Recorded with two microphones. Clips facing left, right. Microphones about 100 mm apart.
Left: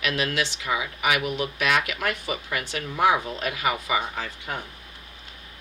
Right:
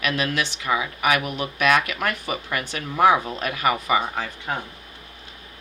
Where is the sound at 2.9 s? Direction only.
50° right (ahead or behind).